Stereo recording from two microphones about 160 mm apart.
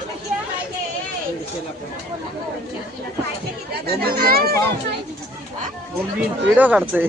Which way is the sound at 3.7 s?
80° right.